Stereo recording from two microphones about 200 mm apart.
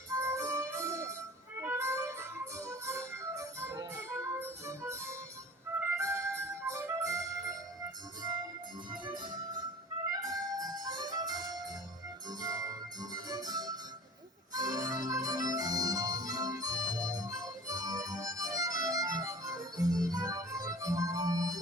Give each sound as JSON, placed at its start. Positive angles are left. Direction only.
{"t": 0.1, "sound": "music", "side_deg": -15}
{"t": 8.9, "sound": "music", "side_deg": -20}
{"t": 14.5, "sound": "organ", "side_deg": -20}